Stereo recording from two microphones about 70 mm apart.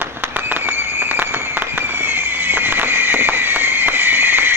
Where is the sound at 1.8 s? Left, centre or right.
Right.